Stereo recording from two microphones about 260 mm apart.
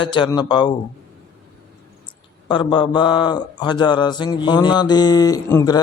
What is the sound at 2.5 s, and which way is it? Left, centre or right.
Speech, centre.